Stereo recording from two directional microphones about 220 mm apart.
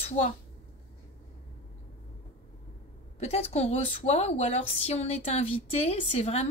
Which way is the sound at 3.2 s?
30° left (ahead or behind).